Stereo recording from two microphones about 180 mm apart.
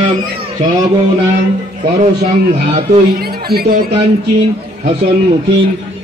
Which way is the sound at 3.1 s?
60° right (ahead or behind).